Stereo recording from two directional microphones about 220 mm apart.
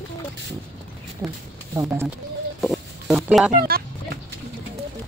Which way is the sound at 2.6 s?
Centre (ahead or behind).